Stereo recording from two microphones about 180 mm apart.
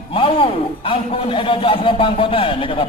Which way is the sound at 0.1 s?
30° left (ahead or behind).